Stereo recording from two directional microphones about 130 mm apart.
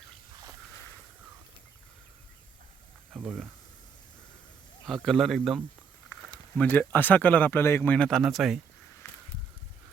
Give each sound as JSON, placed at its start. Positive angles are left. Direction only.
{"t": 3.2, "sound": "speech", "side_deg": -5}
{"t": 5.0, "sound": "a man's voice", "side_deg": 0}
{"t": 6.6, "sound": "speech", "side_deg": 15}
{"t": 9.0, "sound": "a sound", "side_deg": 20}